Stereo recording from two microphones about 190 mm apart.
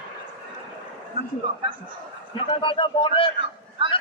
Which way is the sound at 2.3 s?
25° left (ahead or behind).